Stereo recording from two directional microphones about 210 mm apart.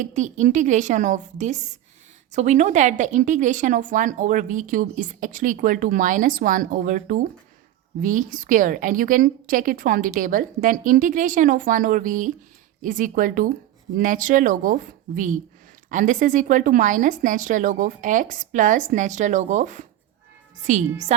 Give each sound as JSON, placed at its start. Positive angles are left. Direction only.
{"t": 0.0, "sound": "a woman's voice", "side_deg": -35}